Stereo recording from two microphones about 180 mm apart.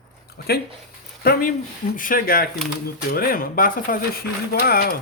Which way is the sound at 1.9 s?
50° left (ahead or behind).